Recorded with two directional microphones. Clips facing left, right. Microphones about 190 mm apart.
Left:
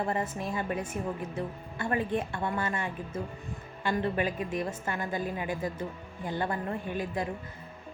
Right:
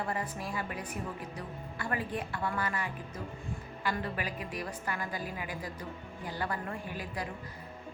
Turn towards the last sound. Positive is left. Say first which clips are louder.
# left 6 dB
turn(degrees=25)  # may be behind; listen again after turning